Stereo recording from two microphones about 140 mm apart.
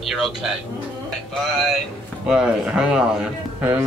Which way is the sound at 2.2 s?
5° right (ahead or behind).